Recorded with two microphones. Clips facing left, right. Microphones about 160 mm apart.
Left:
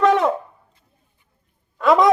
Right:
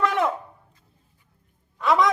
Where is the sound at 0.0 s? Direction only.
35° left (ahead or behind).